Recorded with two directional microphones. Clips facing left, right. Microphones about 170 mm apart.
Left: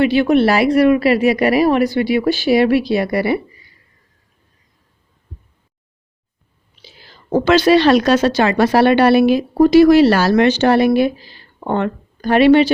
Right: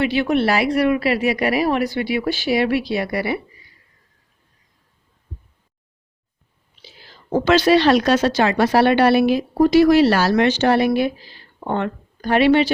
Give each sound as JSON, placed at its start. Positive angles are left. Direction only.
{"t": 0.0, "sound": "speech", "side_deg": 45}
{"t": 7.4, "sound": "speech", "side_deg": 60}
{"t": 12.3, "sound": "speech", "side_deg": 50}